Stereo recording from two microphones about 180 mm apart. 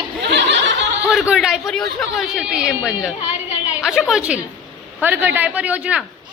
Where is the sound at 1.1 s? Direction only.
5° right (ahead or behind).